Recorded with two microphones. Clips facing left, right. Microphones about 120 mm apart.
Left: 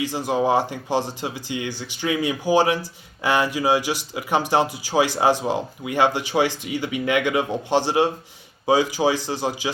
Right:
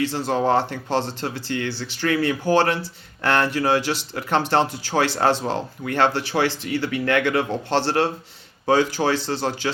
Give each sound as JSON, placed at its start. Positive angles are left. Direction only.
{"t": 0.0, "sound": "speech", "side_deg": 15}